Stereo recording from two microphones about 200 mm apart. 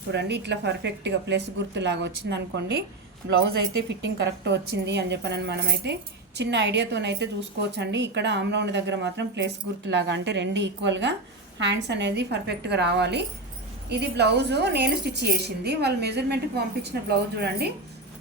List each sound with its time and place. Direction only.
0.1 s a woman's voice: 60° right (ahead or behind)